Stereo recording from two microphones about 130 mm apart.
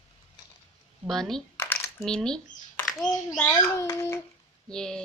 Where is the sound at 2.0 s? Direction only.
5° left (ahead or behind).